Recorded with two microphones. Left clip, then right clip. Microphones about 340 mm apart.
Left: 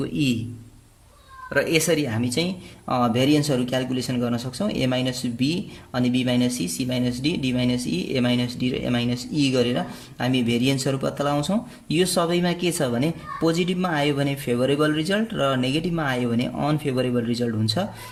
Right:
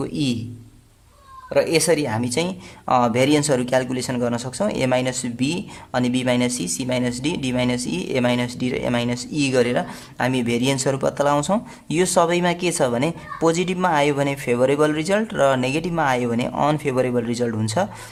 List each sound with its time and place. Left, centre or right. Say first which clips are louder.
0.0 s speech: even; centre
1.5 s speech: right 3 dB; centre